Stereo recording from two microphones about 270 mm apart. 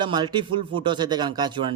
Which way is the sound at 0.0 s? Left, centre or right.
Centre.